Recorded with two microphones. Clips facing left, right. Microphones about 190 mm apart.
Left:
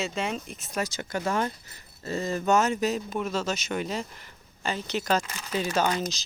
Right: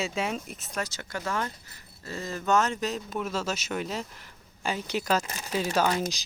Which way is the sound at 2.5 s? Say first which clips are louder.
Left 2 dB; 10° left (ahead or behind).